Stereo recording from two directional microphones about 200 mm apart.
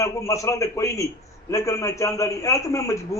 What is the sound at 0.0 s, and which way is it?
A man's voice, 15° left (ahead or behind).